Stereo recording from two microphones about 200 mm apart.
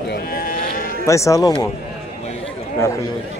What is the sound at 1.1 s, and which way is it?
Speech, 15° left (ahead or behind).